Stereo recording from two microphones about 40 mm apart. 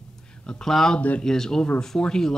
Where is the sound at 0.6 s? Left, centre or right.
Centre.